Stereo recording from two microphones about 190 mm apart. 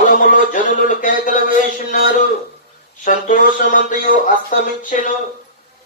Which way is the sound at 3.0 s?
45° left (ahead or behind).